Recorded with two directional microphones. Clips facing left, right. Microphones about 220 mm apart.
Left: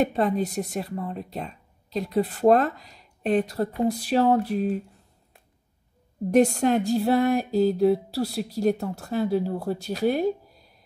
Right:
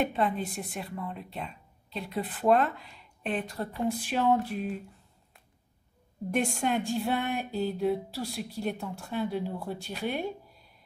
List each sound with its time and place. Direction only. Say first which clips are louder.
0.0 s speech: left 6 dB; 40° left (ahead or behind)
6.3 s speech: left 9 dB; 40° left (ahead or behind)